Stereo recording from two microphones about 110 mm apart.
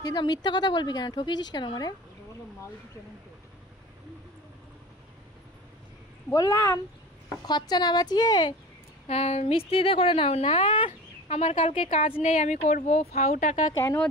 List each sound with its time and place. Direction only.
0.0 s a woman's voice: 40° left (ahead or behind)
6.3 s a woman's voice: 30° left (ahead or behind)
7.4 s a woman's voice: 40° left (ahead or behind)
9.0 s a woman's voice: 75° left (ahead or behind); by 11.3 s 50° left (ahead or behind)
11.3 s speech: 65° left (ahead or behind); by 13.6 s 85° left